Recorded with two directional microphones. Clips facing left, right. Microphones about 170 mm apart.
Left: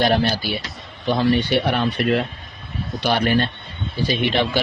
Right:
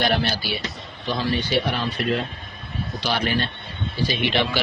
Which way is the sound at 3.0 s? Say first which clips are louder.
Left 5 dB; 50° left (ahead or behind).